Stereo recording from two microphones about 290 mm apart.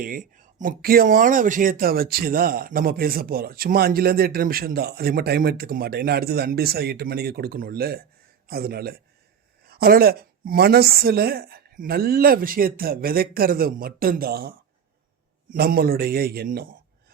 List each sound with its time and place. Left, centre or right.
0.0 s speech: right